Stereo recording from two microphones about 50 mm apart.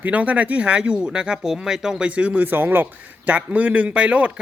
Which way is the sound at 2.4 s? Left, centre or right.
Right.